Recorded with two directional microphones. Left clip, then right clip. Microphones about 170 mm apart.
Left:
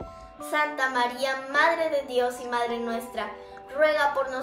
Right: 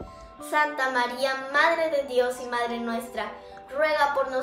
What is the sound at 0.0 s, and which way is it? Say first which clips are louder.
A woman's voice: left 2 dB; 5° right (ahead or behind).